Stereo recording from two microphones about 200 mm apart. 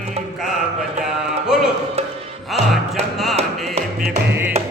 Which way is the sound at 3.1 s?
Centre (ahead or behind).